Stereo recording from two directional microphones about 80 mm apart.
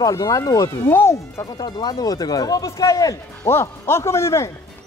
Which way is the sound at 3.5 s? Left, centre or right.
Left.